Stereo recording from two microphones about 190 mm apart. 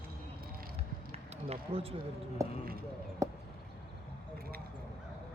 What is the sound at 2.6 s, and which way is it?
Speech, 50° right (ahead or behind).